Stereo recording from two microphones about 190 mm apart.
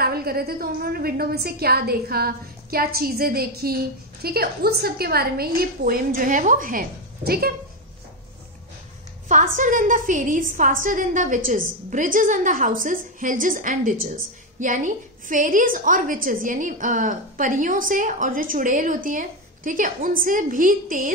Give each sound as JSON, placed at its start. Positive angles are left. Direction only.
{"t": 0.0, "sound": "a woman's voice", "side_deg": -55}
{"t": 9.3, "sound": "a woman's voice", "side_deg": -40}